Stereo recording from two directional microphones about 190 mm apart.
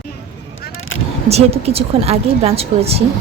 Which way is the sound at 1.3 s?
35° right (ahead or behind).